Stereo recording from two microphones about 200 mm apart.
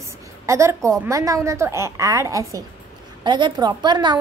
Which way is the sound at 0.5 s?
15° right (ahead or behind).